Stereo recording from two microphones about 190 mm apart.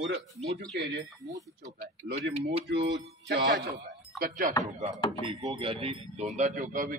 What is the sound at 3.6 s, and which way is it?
Speech, 40° right (ahead or behind).